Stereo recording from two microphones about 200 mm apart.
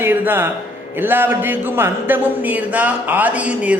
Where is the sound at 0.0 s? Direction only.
10° right (ahead or behind).